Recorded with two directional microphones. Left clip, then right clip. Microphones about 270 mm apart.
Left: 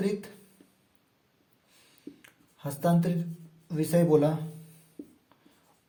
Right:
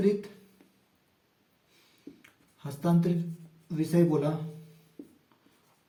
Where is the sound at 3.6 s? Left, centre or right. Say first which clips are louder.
Left 1 dB; left.